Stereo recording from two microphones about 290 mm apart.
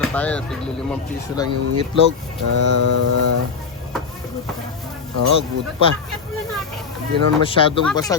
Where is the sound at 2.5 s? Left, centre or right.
Right.